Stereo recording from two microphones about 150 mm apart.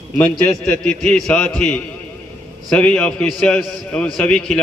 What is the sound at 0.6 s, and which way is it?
A man's voice, 5° left (ahead or behind).